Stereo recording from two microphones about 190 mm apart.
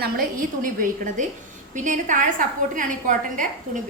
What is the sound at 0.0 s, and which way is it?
A woman's voice, 50° right (ahead or behind).